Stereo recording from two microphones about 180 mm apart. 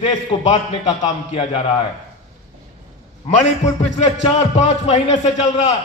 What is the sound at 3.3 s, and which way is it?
A man's voice, 40° left (ahead or behind).